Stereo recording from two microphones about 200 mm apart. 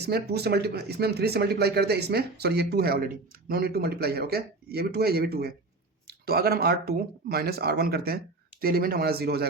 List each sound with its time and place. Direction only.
0.0 s speech: 55° right (ahead or behind)